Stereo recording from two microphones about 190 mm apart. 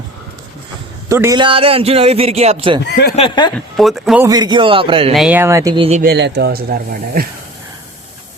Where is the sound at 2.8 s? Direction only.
60° left (ahead or behind).